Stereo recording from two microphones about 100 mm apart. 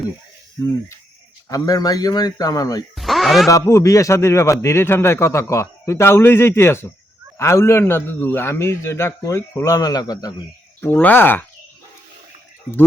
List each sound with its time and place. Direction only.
0.6 s speech: 35° left (ahead or behind)
2.9 s a sound: centre (ahead or behind)
3.5 s a man's voice: 30° left (ahead or behind)
10.8 s a man's voice: 20° left (ahead or behind)